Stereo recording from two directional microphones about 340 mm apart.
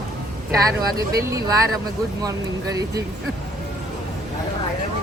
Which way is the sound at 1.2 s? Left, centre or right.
Centre.